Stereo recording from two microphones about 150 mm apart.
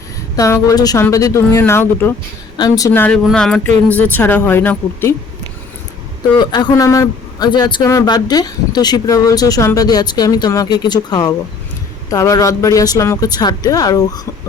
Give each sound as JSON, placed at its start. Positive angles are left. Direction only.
{"t": 0.3, "sound": "speech", "side_deg": 20}
{"t": 2.6, "sound": "speech", "side_deg": 25}
{"t": 6.3, "sound": "speech", "side_deg": 30}